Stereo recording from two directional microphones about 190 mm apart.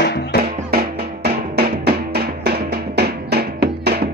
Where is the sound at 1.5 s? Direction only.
55° right (ahead or behind).